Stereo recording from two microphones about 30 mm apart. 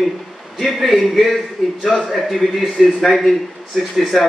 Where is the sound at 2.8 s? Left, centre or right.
Centre.